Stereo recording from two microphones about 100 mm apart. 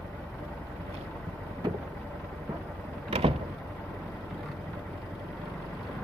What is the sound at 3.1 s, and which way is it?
Vehicle, 70° right (ahead or behind).